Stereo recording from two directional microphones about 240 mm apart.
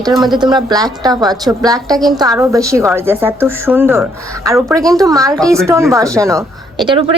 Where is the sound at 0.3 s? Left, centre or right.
Centre.